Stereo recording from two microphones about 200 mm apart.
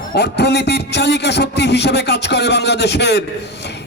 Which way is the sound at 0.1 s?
55° left (ahead or behind).